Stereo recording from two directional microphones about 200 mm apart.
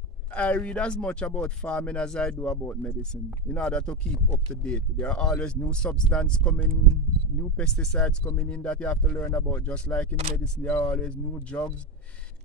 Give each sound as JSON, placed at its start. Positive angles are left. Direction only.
{"t": 0.3, "sound": "speech", "side_deg": 5}